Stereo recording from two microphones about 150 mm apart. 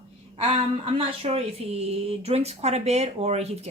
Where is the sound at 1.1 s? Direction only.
40° right (ahead or behind).